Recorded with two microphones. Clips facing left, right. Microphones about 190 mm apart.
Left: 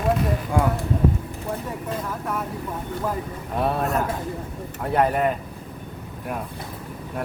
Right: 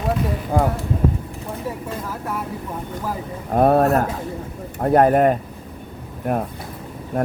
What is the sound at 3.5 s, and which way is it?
Speech, 50° right (ahead or behind).